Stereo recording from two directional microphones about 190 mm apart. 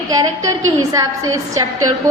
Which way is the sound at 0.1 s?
20° right (ahead or behind).